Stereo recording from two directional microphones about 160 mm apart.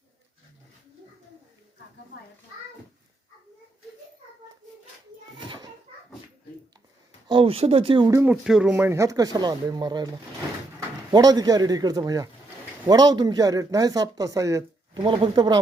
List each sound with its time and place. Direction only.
5.4 s bouncing: 25° right (ahead or behind)
7.3 s speech: 35° right (ahead or behind)
8.1 s speech: 10° right (ahead or behind)
8.7 s speech: 15° right (ahead or behind)
11.1 s speech: 25° right (ahead or behind)